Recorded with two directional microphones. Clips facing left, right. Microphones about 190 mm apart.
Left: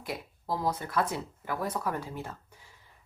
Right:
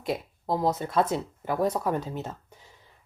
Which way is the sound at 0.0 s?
25° right (ahead or behind).